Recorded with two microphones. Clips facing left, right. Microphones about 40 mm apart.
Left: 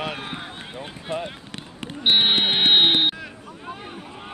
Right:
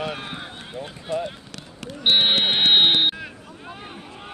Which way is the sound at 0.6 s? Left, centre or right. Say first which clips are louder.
Right 1 dB; centre.